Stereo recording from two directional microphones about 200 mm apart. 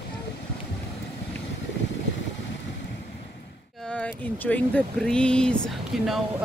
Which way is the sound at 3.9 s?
5° left (ahead or behind).